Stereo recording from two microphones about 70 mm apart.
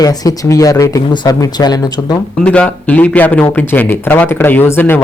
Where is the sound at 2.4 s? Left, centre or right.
Centre.